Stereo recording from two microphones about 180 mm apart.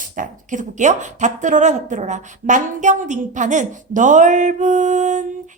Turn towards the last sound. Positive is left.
turn(degrees=-45)  # may be behind; listen again after turning